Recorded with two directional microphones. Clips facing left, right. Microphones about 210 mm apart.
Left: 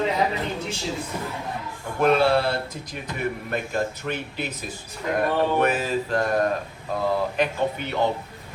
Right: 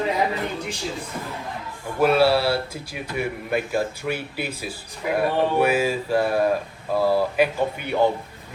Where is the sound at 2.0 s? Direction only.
5° right (ahead or behind).